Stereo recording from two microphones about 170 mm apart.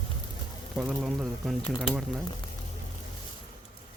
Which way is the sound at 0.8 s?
5° right (ahead or behind).